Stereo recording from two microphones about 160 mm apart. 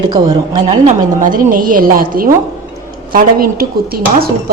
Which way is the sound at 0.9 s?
55° right (ahead or behind).